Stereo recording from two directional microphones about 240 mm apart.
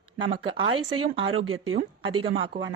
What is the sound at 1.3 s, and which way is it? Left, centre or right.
Speech, right.